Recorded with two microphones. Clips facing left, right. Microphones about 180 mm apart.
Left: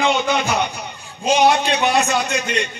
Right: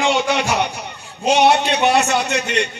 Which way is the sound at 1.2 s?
70° right (ahead or behind).